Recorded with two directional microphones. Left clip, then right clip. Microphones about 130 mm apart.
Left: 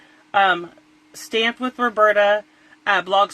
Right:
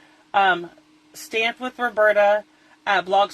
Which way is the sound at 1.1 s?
50° left (ahead or behind).